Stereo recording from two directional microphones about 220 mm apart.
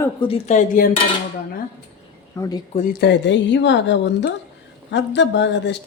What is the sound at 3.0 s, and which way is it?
Speech, 50° left (ahead or behind).